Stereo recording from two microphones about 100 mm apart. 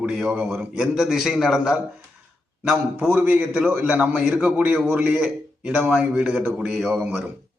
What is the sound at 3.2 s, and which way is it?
A man's voice, 15° right (ahead or behind).